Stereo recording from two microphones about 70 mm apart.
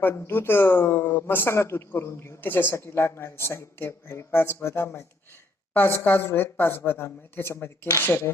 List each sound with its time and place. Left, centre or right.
0.0 s speech: left